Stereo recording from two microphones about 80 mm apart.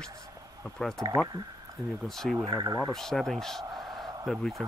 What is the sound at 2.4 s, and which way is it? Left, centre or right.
Speech, right.